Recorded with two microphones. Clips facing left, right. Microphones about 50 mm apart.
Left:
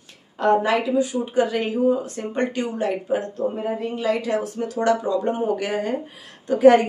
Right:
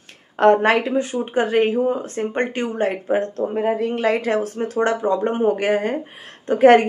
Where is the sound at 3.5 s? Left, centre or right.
Right.